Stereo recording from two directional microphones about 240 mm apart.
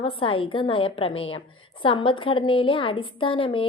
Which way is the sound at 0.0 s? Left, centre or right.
Left.